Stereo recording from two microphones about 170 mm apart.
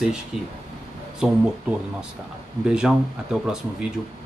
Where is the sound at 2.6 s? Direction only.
5° right (ahead or behind).